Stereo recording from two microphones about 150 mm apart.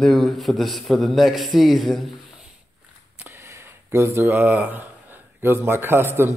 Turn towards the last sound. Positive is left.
turn(degrees=-15)  # may be behind; listen again after turning